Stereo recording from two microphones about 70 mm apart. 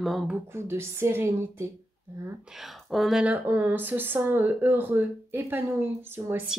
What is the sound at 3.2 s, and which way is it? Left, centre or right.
Speech, right.